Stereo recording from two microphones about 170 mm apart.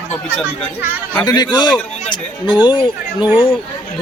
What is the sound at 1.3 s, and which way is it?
Speech, 25° left (ahead or behind).